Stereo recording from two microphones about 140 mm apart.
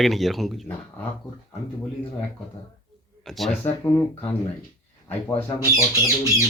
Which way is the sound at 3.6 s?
15° left (ahead or behind).